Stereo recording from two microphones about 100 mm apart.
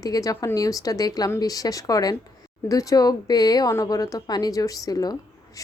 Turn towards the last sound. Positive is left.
turn(degrees=40)  # may be behind; listen again after turning